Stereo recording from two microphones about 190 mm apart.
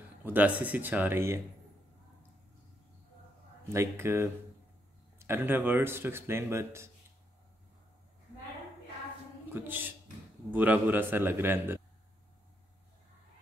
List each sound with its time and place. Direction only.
0.2 s speech: 10° right (ahead or behind)
3.7 s speech: 15° right (ahead or behind)
9.5 s speech: 10° right (ahead or behind)